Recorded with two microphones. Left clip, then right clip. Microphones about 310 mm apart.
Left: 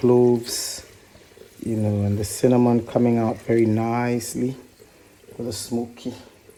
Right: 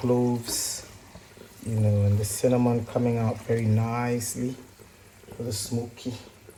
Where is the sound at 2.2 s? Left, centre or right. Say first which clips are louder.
Left 5 dB; left.